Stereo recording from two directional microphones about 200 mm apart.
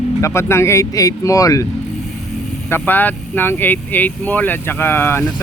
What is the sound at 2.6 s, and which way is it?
Speech, 10° left (ahead or behind).